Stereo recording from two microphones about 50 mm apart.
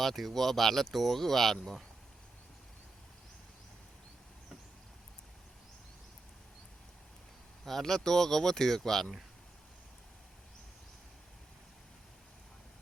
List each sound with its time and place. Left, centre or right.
0.0 s speech: centre
7.6 s speech: centre